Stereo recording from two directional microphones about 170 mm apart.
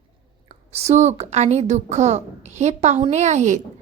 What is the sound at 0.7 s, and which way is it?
A woman's voice, 40° right (ahead or behind).